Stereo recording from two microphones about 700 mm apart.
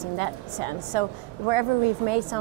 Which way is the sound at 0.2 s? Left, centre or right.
Right.